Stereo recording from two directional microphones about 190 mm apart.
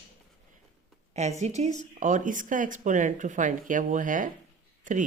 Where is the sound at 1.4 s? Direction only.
35° right (ahead or behind).